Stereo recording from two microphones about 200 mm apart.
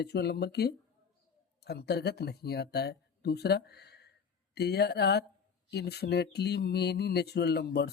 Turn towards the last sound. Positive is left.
turn(degrees=55)  # may be behind; listen again after turning